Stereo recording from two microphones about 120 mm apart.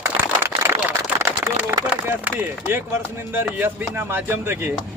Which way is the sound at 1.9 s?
10° right (ahead or behind).